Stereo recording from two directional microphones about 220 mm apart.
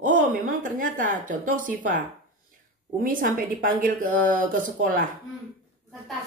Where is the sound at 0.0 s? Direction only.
35° right (ahead or behind).